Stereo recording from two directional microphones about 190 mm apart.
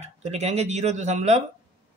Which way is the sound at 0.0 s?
35° right (ahead or behind).